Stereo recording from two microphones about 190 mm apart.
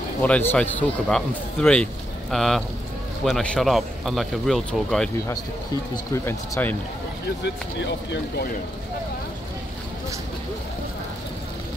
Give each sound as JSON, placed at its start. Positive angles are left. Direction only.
{"t": 0.2, "sound": "speech", "side_deg": 10}
{"t": 6.1, "sound": "speech", "side_deg": 15}
{"t": 7.4, "sound": "speech", "side_deg": 65}